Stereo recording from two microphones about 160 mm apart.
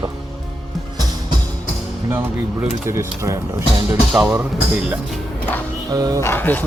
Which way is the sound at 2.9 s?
15° right (ahead or behind).